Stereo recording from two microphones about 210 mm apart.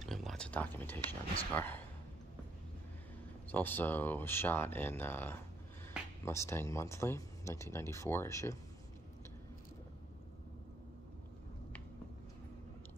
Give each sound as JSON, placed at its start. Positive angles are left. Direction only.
{"t": 0.0, "sound": "a sound", "side_deg": 0}
{"t": 1.0, "sound": "speech", "side_deg": 25}
{"t": 1.5, "sound": "speech", "side_deg": 10}
{"t": 3.5, "sound": "speech", "side_deg": 10}